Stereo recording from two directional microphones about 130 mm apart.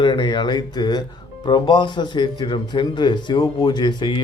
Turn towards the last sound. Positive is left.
turn(degrees=35)  # may be behind; listen again after turning